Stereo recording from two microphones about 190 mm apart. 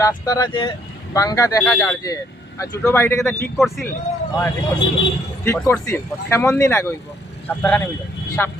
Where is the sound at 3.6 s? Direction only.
Centre (ahead or behind).